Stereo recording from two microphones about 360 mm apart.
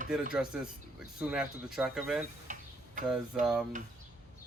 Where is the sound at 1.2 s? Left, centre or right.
Centre.